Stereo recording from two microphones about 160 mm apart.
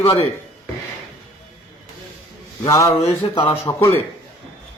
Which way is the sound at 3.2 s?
35° left (ahead or behind).